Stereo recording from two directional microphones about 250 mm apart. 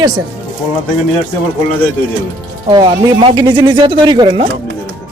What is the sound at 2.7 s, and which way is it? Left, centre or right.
Speech, centre.